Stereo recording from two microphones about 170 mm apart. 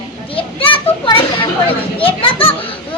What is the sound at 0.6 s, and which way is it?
Children playing, 30° left (ahead or behind).